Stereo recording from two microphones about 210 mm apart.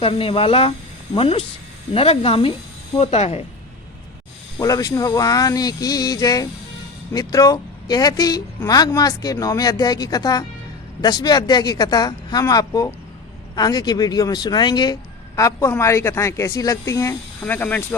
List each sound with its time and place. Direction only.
0.0 s speech: 25° left (ahead or behind)
4.6 s speech: 15° left (ahead or behind)